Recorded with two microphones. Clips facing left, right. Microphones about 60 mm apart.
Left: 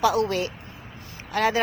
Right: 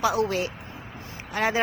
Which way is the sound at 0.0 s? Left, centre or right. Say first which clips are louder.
Left 2 dB; centre.